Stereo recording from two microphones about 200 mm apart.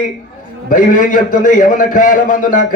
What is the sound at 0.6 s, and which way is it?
A man's voice, 45° left (ahead or behind).